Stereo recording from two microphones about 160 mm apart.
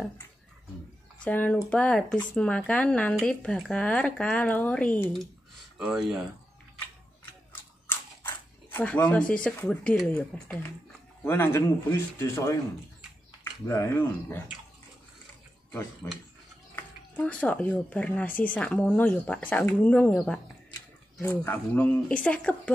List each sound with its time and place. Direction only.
1.2 s speech: 10° left (ahead or behind)
5.8 s speech: 5° right (ahead or behind)
7.8 s a sound: 15° left (ahead or behind)
9.3 s speech: 10° left (ahead or behind)
16.7 s speech: 10° left (ahead or behind)
21.2 s speech: 10° left (ahead or behind)